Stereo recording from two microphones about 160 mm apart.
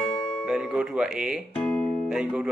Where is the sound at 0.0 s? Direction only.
30° left (ahead or behind).